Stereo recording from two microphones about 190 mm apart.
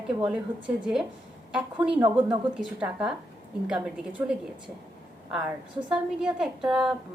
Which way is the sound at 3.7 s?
5° right (ahead or behind).